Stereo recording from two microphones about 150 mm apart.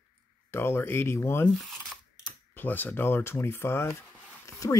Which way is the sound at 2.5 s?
10° left (ahead or behind).